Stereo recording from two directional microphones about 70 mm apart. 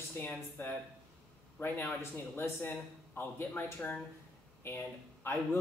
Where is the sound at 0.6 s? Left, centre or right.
Left.